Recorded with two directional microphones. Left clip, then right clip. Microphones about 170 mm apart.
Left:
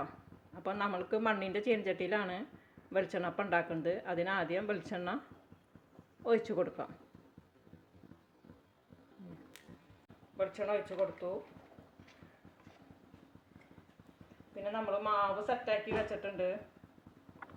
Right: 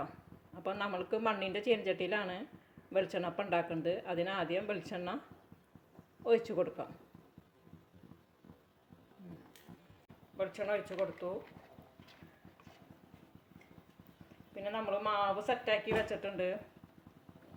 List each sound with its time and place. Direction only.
0.5 s speech: 5° left (ahead or behind)
6.2 s speech: 5° left (ahead or behind)
10.3 s speech: 10° right (ahead or behind)
14.5 s speech: 10° right (ahead or behind); by 16.6 s 25° right (ahead or behind)